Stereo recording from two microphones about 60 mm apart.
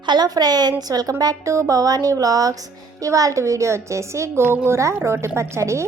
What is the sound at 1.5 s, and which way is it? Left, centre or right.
A woman's voice, right.